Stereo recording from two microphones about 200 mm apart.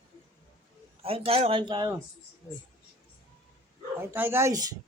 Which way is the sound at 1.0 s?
30° right (ahead or behind).